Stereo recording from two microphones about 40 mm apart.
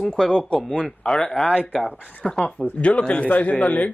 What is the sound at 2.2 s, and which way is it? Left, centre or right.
Speech, centre.